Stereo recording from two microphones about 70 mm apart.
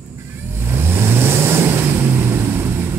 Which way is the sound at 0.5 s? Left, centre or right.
Right.